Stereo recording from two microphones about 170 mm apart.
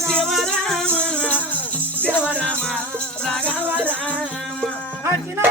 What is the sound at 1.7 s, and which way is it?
Music, 10° right (ahead or behind).